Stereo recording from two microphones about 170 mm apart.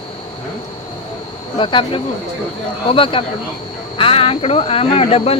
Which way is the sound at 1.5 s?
30° left (ahead or behind).